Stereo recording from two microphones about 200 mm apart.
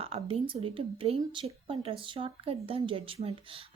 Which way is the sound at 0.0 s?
30° right (ahead or behind).